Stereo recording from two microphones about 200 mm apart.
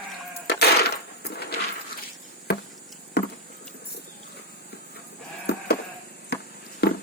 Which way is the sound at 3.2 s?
55° left (ahead or behind).